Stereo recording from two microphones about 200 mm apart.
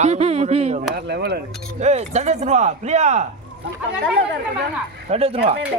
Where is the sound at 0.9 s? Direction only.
55° right (ahead or behind).